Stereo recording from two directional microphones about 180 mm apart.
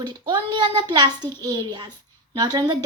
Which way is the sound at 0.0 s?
25° right (ahead or behind).